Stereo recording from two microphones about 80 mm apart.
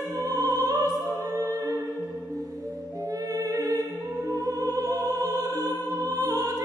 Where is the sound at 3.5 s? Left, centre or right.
Right.